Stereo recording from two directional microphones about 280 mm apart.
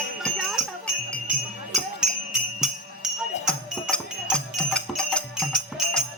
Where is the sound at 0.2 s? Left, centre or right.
Centre.